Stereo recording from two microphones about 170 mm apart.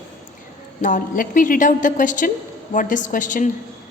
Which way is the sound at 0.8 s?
50° left (ahead or behind).